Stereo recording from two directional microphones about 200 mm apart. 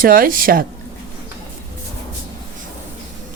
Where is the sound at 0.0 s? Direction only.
45° right (ahead or behind).